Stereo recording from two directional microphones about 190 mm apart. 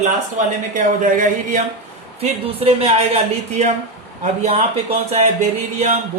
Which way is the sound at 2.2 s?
30° right (ahead or behind).